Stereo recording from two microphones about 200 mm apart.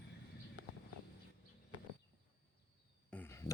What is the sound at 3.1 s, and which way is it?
Cricket, 10° left (ahead or behind).